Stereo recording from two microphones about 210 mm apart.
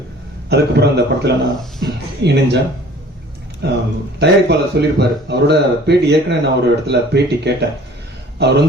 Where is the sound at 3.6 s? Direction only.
55° right (ahead or behind).